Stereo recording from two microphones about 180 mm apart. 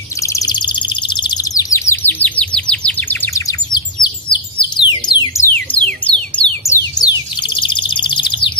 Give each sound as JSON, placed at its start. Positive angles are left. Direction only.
{"t": 0.2, "sound": "bird", "side_deg": 20}